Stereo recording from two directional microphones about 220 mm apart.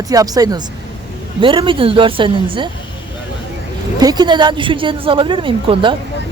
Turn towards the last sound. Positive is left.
turn(degrees=-25)  # may be behind; listen again after turning